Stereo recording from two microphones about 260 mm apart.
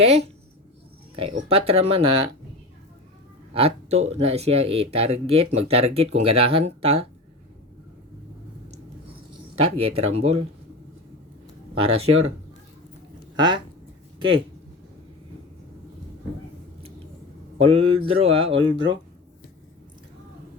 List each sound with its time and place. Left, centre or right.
0.0 s speech: right
3.5 s speech: right
9.6 s speech: right
11.8 s speech: right
13.3 s speech: centre
17.6 s speech: right